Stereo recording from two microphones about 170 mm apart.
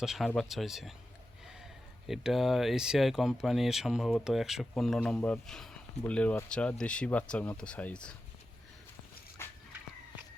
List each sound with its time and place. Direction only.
0.0 s speech: centre (ahead or behind)
2.0 s speech: centre (ahead or behind)
9.4 s a sound: 15° left (ahead or behind)